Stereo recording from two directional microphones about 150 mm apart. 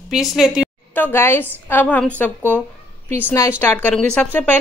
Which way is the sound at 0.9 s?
15° left (ahead or behind).